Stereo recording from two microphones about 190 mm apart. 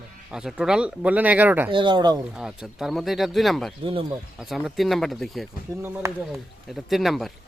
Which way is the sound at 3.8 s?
30° right (ahead or behind).